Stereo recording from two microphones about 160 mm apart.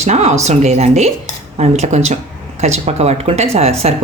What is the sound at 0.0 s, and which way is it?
Speech, 45° right (ahead or behind).